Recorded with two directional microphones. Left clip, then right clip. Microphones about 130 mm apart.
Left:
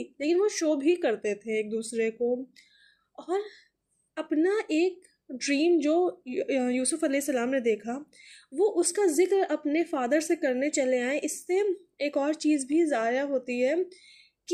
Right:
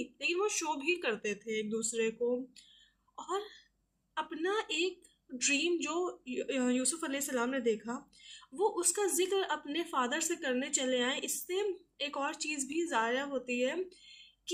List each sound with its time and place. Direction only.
0.0 s speech: 35° left (ahead or behind)
3.2 s speech: 35° left (ahead or behind)